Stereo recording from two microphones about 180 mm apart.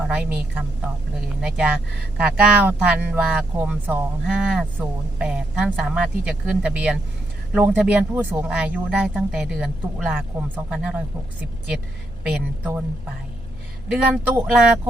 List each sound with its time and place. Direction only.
0.1 s speech: 10° right (ahead or behind)
13.8 s speech: 5° right (ahead or behind)